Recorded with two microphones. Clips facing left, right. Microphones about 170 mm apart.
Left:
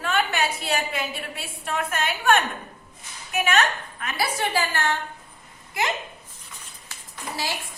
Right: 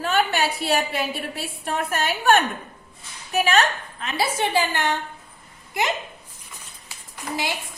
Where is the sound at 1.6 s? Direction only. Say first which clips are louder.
Right 2 dB; 35° right (ahead or behind); by 5.0 s 15° right (ahead or behind).